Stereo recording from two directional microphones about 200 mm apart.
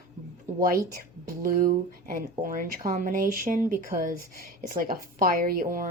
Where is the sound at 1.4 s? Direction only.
45° right (ahead or behind).